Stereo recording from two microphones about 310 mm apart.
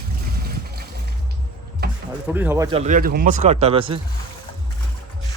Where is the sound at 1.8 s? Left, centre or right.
Right.